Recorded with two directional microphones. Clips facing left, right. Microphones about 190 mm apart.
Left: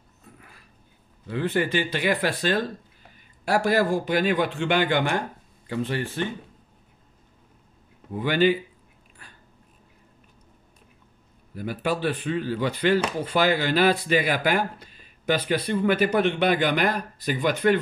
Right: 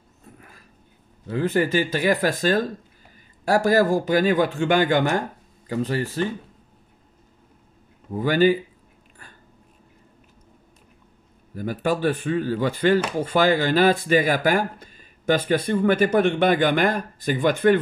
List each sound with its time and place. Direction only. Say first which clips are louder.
1.3 s speech: right 3 dB; 40° right (ahead or behind)
8.1 s speech: right 3 dB; 40° right (ahead or behind)
11.5 s speech: right 3 dB; 45° right (ahead or behind)